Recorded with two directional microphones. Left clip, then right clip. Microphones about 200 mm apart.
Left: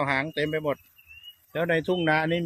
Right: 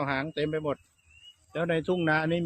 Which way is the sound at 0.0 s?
20° left (ahead or behind).